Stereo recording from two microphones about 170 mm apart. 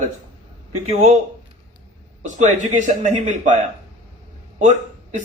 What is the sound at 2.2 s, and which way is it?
A man's voice, 45° right (ahead or behind).